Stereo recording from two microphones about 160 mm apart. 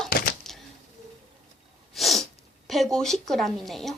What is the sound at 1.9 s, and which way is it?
Sneeze, centre (ahead or behind).